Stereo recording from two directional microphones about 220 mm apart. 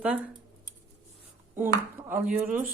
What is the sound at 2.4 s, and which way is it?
Speech, 35° right (ahead or behind).